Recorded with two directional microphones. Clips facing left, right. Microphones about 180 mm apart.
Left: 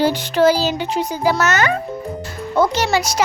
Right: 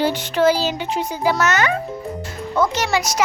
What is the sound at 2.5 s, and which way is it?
Speech, 30° left (ahead or behind).